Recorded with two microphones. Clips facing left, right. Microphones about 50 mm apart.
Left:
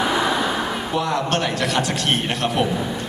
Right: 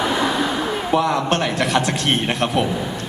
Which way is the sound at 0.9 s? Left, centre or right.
Right.